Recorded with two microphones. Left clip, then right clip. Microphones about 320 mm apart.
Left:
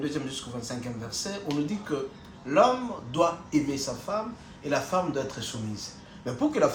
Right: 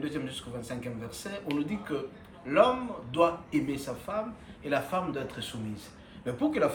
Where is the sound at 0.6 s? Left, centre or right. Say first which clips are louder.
Left 2 dB; centre.